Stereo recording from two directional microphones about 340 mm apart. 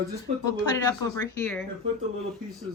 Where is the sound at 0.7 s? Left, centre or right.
Centre.